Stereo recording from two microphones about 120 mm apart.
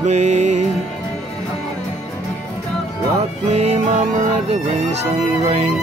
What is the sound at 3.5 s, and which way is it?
Music, 65° right (ahead or behind).